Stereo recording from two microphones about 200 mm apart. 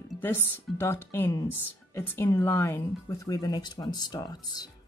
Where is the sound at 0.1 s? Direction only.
10° left (ahead or behind).